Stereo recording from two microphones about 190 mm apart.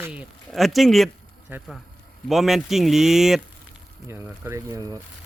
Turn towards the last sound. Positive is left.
turn(degrees=-20)  # may be behind; listen again after turning